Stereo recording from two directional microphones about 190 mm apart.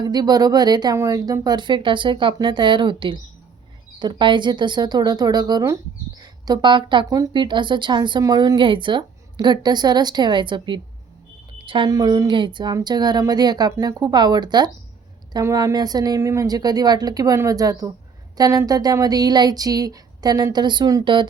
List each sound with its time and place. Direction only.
0.0 s speech: 20° right (ahead or behind)